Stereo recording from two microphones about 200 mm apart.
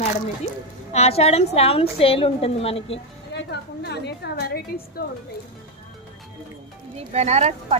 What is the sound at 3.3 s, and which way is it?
A woman's voice, 55° left (ahead or behind).